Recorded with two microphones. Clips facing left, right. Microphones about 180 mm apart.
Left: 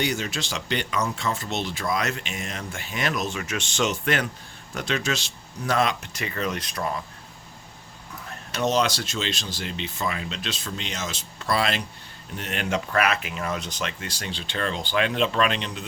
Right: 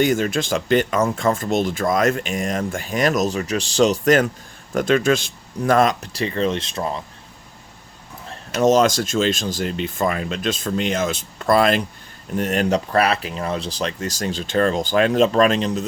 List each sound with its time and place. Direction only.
0.0 s speech: 50° right (ahead or behind); by 7.0 s 25° right (ahead or behind)
8.3 s speech: 45° right (ahead or behind)